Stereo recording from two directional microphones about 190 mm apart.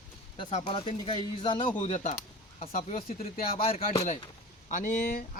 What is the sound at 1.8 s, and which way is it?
Speech, 35° left (ahead or behind).